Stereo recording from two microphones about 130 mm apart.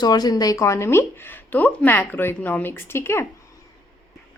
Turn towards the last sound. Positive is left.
turn(degrees=20)  # may be behind; listen again after turning